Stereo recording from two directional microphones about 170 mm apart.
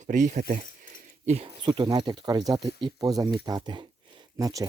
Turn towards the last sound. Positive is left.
turn(degrees=-20)  # may be behind; listen again after turning